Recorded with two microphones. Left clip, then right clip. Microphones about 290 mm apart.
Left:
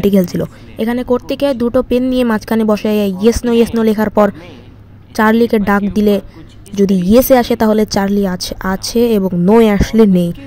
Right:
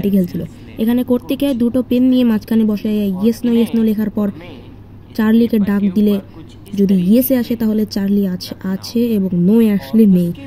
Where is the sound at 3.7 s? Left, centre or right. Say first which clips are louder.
Left 7 dB; left.